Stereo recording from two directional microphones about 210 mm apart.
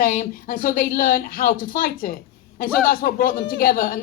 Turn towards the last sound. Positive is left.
turn(degrees=40)  # may be behind; listen again after turning